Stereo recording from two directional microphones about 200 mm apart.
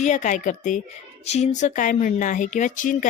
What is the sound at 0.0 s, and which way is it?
Speech, 40° left (ahead or behind).